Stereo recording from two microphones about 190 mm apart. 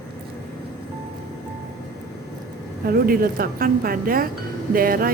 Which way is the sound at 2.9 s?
50° right (ahead or behind).